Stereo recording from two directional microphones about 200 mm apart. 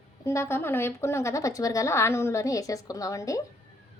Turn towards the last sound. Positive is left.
turn(degrees=15)  # may be behind; listen again after turning